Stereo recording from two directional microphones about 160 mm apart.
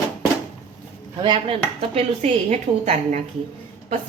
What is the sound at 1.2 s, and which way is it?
A woman's voice, 30° right (ahead or behind).